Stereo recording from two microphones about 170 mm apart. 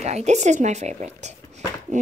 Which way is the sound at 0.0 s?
40° right (ahead or behind).